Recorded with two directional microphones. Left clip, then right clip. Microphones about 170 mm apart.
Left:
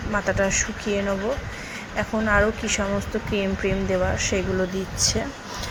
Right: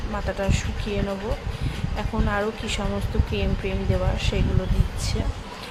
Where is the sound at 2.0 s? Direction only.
10° left (ahead or behind).